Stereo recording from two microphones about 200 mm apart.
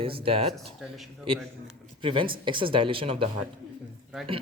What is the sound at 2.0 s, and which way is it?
Speech, 25° right (ahead or behind).